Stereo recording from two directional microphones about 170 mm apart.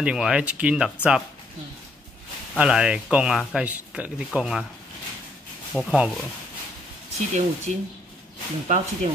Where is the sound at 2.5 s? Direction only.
5° right (ahead or behind).